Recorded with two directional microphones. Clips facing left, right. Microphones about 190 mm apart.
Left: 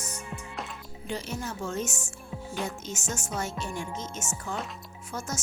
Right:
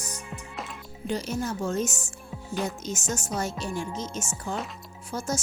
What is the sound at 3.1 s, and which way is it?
Speech, 35° right (ahead or behind).